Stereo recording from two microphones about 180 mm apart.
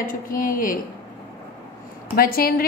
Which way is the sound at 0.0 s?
50° left (ahead or behind).